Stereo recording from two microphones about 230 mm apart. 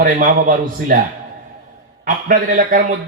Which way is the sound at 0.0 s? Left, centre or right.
Right.